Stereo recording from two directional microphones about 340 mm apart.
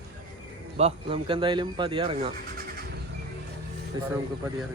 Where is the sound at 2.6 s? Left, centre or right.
Right.